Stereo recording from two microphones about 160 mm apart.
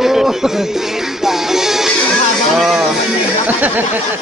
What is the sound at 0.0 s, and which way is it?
Music, 5° right (ahead or behind).